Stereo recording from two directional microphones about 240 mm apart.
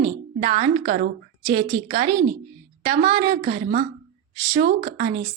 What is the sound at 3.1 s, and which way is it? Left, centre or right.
A woman's voice, right.